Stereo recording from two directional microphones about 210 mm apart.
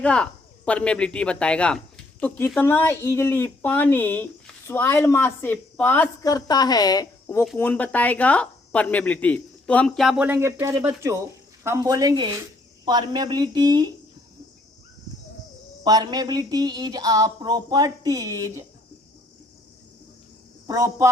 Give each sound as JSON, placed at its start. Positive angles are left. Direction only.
{"t": 0.0, "sound": "speech", "side_deg": 5}
{"t": 15.8, "sound": "speech", "side_deg": -20}
{"t": 20.7, "sound": "speech", "side_deg": -15}